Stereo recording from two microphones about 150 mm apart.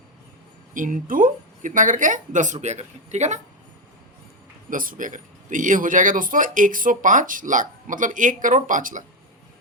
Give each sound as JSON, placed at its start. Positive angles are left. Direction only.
{"t": 0.7, "sound": "speech", "side_deg": -65}
{"t": 4.7, "sound": "speech", "side_deg": -65}